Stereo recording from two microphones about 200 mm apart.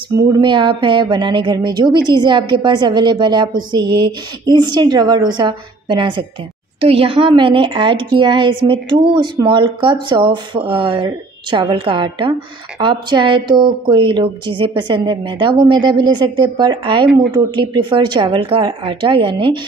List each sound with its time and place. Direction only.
0.1 s a woman's voice: 20° right (ahead or behind)